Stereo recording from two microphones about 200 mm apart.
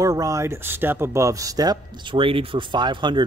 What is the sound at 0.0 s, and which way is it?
Speech, 15° right (ahead or behind).